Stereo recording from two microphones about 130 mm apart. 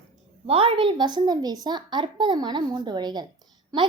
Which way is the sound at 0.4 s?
45° right (ahead or behind).